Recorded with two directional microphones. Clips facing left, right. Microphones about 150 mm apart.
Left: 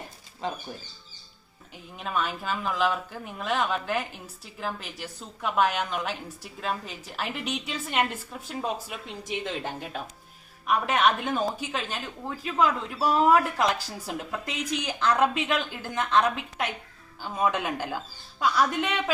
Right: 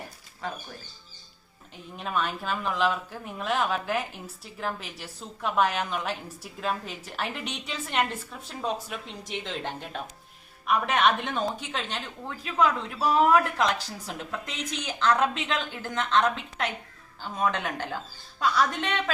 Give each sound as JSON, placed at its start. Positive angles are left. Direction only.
{"t": 0.4, "sound": "speech", "side_deg": 20}
{"t": 2.0, "sound": "speech", "side_deg": 0}